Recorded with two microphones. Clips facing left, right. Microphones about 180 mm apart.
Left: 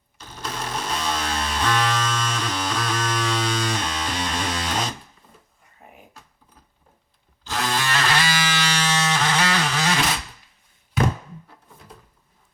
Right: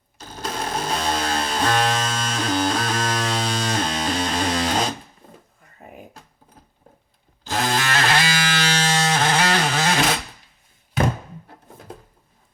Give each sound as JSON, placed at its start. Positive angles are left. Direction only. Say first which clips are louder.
{"t": 0.2, "sound": "music", "louder": "right 3 dB", "side_deg": -35}
{"t": 7.4, "sound": "electric toothbrush", "louder": "right 3 dB", "side_deg": -45}
{"t": 8.4, "sound": "music", "louder": "right 2 dB", "side_deg": -50}
{"t": 8.9, "sound": "a sound", "louder": "right 3 dB", "side_deg": -35}